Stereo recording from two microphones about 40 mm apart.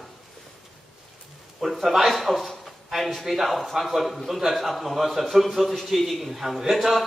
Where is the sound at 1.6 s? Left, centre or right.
Centre.